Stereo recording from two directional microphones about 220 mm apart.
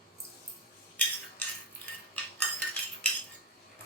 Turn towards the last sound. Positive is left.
turn(degrees=5)  # may be behind; listen again after turning